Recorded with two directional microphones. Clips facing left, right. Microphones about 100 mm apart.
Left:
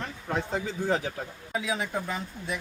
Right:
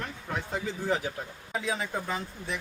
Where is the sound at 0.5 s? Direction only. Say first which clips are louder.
Even; 25° left (ahead or behind).